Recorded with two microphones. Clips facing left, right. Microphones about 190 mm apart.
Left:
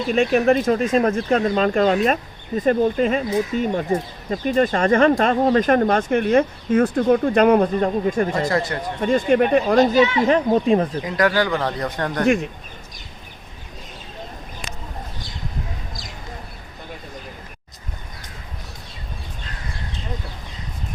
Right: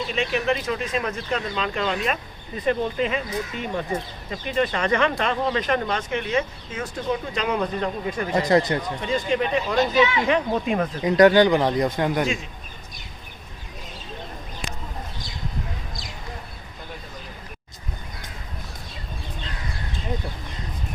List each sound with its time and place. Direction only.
0.1 s speech: 45° left (ahead or behind)
8.4 s speech: 20° right (ahead or behind)
9.0 s speech: 50° left (ahead or behind); by 10.8 s 35° left (ahead or behind)
11.0 s speech: 25° right (ahead or behind)
12.2 s speech: 60° left (ahead or behind)